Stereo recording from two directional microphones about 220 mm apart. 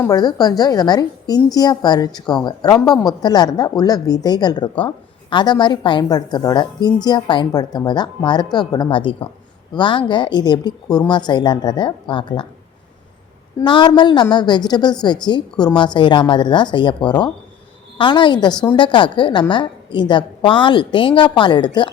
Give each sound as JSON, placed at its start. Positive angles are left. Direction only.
{"t": 0.0, "sound": "a woman's voice", "side_deg": 15}
{"t": 13.7, "sound": "a woman's voice", "side_deg": 20}